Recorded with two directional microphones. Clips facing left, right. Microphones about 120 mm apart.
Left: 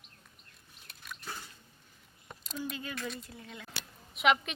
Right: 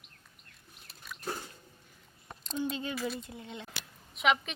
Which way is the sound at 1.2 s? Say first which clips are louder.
Right 7 dB; 45° right (ahead or behind).